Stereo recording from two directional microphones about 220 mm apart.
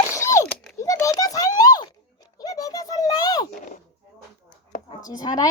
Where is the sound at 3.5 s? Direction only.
35° left (ahead or behind).